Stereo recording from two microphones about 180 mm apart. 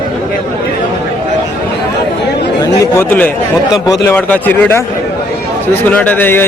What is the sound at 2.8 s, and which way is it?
Speech, 10° left (ahead or behind).